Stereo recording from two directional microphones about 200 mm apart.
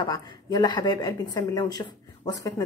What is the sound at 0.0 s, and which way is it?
Speech, 20° left (ahead or behind).